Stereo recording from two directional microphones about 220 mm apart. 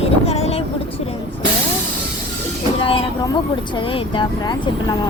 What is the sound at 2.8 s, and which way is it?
Speech, 25° left (ahead or behind).